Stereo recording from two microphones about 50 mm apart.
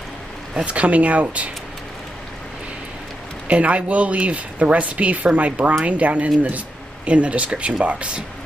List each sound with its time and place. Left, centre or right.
0.7 s speech: right
3.4 s speech: right